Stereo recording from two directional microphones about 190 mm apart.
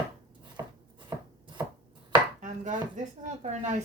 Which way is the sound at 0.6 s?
15° right (ahead or behind).